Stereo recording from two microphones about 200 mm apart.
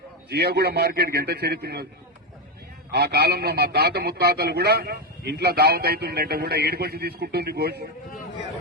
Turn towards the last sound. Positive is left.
turn(degrees=-55)  # may be behind; listen again after turning